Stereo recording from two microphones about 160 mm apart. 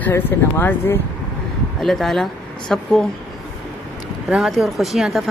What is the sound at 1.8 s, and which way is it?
Speech, centre (ahead or behind).